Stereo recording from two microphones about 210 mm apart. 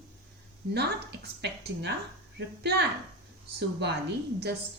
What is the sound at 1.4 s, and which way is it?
Speech, 55° right (ahead or behind).